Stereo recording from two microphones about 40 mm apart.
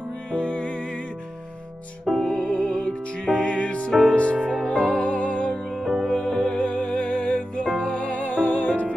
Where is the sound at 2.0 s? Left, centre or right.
Centre.